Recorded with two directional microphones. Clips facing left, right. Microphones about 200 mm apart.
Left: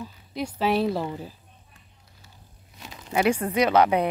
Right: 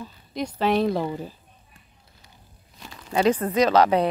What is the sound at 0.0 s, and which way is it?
Speech, 5° left (ahead or behind).